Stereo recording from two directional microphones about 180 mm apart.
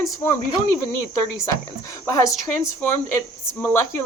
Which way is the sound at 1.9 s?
15° left (ahead or behind).